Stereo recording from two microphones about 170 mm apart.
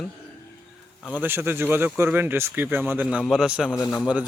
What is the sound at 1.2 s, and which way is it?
A man's voice, 15° right (ahead or behind).